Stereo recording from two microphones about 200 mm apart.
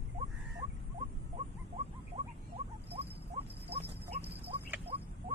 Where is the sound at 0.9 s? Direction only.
35° right (ahead or behind).